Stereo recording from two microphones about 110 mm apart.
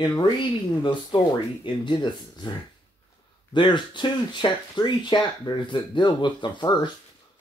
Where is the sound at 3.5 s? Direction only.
45° left (ahead or behind).